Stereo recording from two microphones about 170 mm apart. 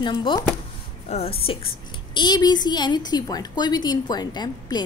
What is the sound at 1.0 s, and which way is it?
A woman's voice, 35° left (ahead or behind).